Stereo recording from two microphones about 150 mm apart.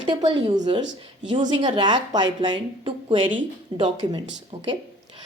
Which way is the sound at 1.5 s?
30° right (ahead or behind).